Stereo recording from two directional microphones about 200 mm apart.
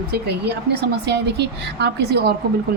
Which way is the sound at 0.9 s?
55° right (ahead or behind).